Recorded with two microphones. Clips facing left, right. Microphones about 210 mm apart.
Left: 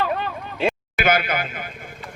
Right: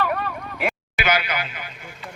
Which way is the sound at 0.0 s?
25° left (ahead or behind).